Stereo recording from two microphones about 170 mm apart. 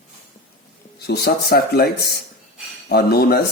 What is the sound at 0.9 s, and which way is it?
Speech, 70° left (ahead or behind).